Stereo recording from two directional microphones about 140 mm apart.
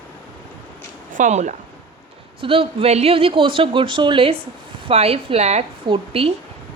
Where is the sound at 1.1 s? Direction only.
60° right (ahead or behind).